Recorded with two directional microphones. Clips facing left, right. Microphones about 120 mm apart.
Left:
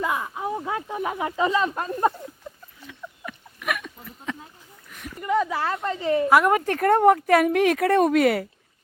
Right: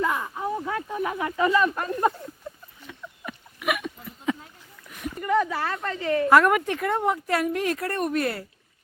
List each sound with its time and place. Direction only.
0.0 s speech: 10° left (ahead or behind)
3.2 s a sound: 10° right (ahead or behind)
5.2 s a woman's voice: 15° left (ahead or behind)
6.2 s a woman's voice: 10° left (ahead or behind)
6.7 s speech: 50° left (ahead or behind); by 8.4 s 90° left